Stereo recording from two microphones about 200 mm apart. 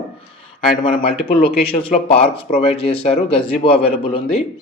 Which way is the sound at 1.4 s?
30° left (ahead or behind).